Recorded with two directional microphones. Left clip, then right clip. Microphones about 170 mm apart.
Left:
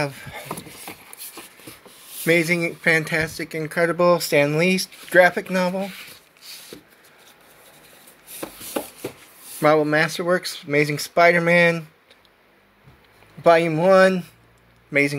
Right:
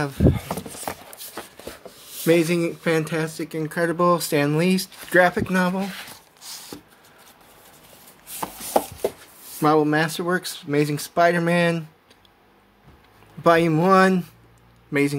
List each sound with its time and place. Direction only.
0.0 s speech: 5° right (ahead or behind)
2.2 s speech: centre (ahead or behind); by 5.9 s 20° right (ahead or behind)
9.6 s speech: 5° right (ahead or behind)
13.4 s a man's voice: 20° right (ahead or behind)